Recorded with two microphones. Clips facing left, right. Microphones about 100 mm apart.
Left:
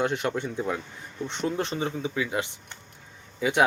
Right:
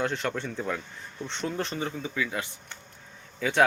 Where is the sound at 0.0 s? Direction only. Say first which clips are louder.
Left 3 dB; 15° left (ahead or behind).